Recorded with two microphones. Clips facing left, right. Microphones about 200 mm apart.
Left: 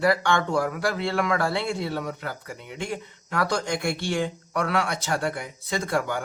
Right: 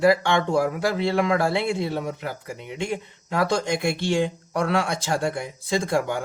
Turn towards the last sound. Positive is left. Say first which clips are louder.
# right 3 dB
turn(degrees=-25)  # may be behind; listen again after turning